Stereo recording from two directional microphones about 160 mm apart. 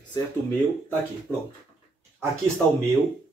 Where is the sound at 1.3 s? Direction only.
10° right (ahead or behind).